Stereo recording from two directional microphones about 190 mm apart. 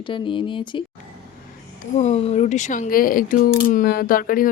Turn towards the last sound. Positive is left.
turn(degrees=50)  # may be behind; listen again after turning